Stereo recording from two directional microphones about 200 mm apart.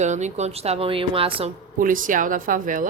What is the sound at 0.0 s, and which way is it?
A woman's voice, 35° right (ahead or behind).